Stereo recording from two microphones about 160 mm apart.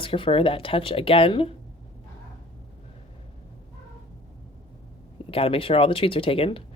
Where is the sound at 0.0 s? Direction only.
35° left (ahead or behind).